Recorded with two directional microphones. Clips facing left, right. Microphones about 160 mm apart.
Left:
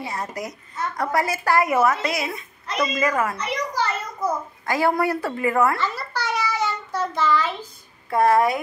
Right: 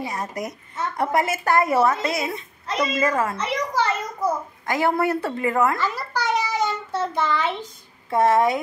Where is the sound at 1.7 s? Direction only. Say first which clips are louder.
Even; 30° right (ahead or behind).